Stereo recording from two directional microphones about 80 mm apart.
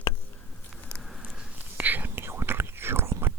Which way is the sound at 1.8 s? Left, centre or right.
Right.